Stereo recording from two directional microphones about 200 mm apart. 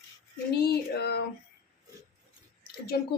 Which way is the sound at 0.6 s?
55° left (ahead or behind).